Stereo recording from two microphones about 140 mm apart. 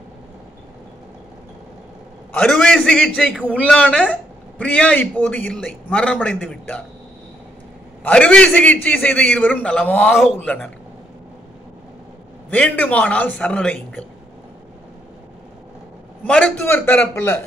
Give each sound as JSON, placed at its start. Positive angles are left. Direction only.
{"t": 2.3, "sound": "a man's voice", "side_deg": 5}
{"t": 8.0, "sound": "a man's voice", "side_deg": 10}
{"t": 12.4, "sound": "a man's voice", "side_deg": 10}
{"t": 16.3, "sound": "a man's voice", "side_deg": 10}